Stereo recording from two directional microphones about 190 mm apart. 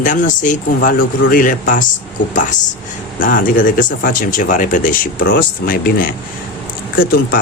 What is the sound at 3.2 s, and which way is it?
Speech, 45° left (ahead or behind).